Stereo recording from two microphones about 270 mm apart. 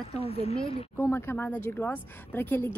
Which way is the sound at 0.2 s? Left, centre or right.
Right.